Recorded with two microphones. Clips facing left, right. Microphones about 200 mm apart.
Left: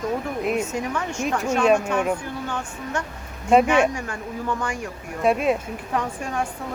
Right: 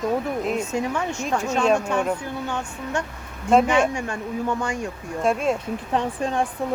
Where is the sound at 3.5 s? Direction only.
5° left (ahead or behind).